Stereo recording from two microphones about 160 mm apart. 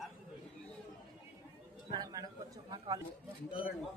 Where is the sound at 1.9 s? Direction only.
25° right (ahead or behind).